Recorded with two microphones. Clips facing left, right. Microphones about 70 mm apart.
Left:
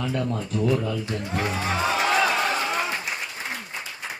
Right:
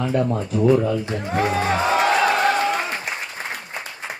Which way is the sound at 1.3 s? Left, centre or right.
Right.